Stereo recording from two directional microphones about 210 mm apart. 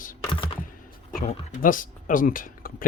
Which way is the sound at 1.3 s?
40° left (ahead or behind).